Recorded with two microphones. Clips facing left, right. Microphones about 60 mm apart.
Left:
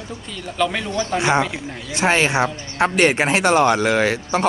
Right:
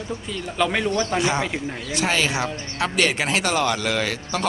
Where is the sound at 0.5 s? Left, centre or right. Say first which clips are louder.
Even; centre.